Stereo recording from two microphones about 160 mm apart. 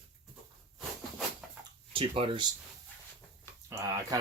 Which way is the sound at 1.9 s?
35° right (ahead or behind).